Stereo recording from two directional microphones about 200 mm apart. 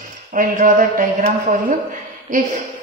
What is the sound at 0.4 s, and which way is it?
Speech, 40° right (ahead or behind).